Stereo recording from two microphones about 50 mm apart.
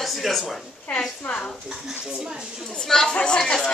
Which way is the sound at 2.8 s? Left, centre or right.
Centre.